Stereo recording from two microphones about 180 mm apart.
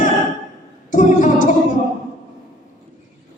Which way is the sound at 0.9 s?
45° left (ahead or behind).